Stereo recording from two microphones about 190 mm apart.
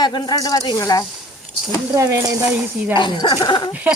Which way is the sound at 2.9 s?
25° left (ahead or behind).